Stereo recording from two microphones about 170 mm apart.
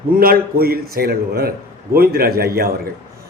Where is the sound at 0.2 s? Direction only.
60° right (ahead or behind).